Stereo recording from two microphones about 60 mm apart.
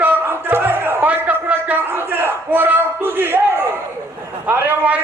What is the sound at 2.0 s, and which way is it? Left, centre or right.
Battle cry, right.